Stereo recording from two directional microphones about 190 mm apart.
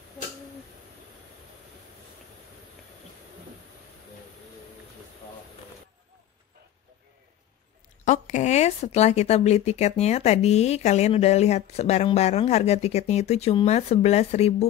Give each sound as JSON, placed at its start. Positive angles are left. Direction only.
{"t": 8.0, "sound": "speech", "side_deg": 40}